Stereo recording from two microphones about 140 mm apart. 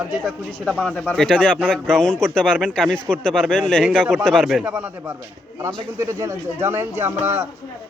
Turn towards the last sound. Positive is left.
turn(degrees=-15)  # may be behind; listen again after turning